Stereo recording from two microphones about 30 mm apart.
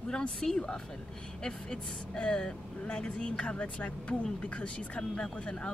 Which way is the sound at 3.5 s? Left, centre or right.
Left.